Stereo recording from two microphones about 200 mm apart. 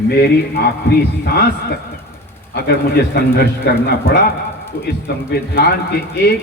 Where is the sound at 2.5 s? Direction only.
50° left (ahead or behind).